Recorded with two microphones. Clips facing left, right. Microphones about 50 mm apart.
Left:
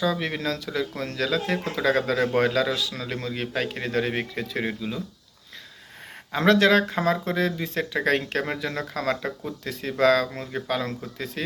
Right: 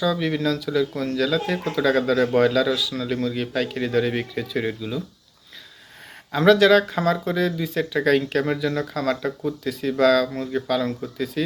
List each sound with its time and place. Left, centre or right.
0.0 s speech: left
6.3 s speech: left